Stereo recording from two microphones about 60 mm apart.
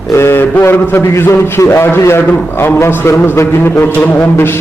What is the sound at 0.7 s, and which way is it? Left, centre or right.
A man's voice, left.